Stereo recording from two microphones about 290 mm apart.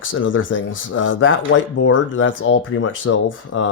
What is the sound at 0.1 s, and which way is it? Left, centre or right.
Speech, left.